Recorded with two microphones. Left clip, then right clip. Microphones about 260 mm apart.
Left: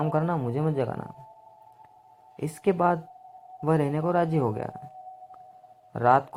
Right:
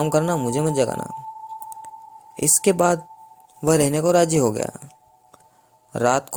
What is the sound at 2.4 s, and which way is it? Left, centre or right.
Speech, right.